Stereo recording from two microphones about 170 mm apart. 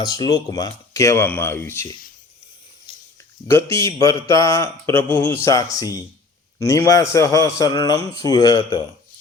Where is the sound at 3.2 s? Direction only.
15° left (ahead or behind).